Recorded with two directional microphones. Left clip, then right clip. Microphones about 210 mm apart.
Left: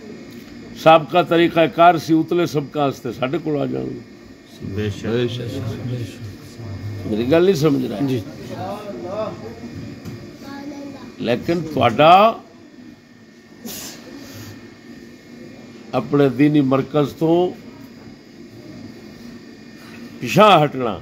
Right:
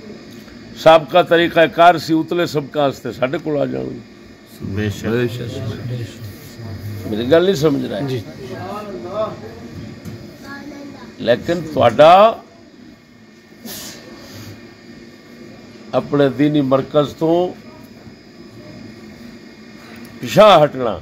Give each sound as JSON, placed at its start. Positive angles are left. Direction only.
{"t": 0.8, "sound": "a man's voice", "side_deg": -10}
{"t": 4.7, "sound": "speech", "side_deg": -50}
{"t": 7.2, "sound": "a man's voice", "side_deg": 0}
{"t": 11.1, "sound": "a man's voice", "side_deg": 0}
{"t": 15.9, "sound": "a man's voice", "side_deg": -5}
{"t": 20.3, "sound": "a man's voice", "side_deg": -5}